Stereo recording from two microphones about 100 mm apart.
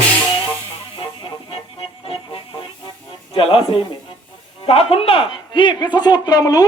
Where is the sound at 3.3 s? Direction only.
70° left (ahead or behind).